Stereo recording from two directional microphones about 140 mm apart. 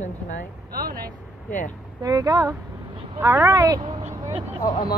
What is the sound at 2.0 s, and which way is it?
A woman's voice, 25° right (ahead or behind).